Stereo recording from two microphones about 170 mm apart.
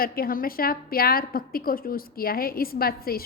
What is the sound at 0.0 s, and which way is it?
A woman's voice, 60° left (ahead or behind).